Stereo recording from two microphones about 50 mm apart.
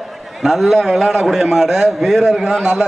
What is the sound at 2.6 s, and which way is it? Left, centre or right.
Speech, centre.